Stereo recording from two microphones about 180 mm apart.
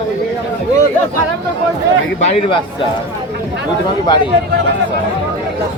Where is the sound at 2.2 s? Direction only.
30° left (ahead or behind).